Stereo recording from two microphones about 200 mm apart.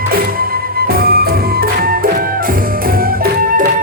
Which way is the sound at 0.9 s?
50° right (ahead or behind).